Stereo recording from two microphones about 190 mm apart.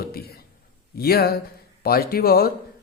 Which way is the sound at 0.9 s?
55° left (ahead or behind).